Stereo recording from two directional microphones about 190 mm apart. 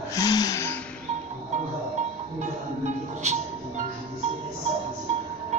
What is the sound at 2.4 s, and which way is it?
Music, 40° right (ahead or behind).